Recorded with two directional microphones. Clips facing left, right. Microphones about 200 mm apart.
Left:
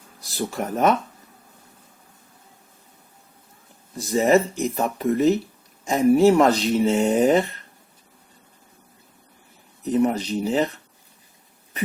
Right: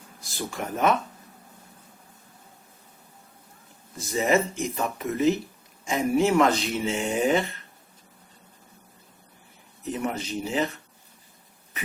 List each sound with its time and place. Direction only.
0.3 s speech: 40° left (ahead or behind)
3.9 s speech: 40° left (ahead or behind)
9.9 s speech: 35° left (ahead or behind)